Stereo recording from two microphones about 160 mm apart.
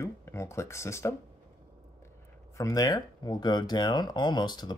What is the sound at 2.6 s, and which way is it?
Speech, 20° left (ahead or behind).